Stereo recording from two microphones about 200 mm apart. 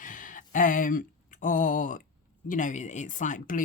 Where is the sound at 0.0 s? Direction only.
40° left (ahead or behind).